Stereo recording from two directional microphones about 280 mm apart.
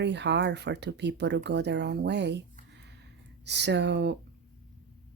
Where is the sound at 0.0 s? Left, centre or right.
Right.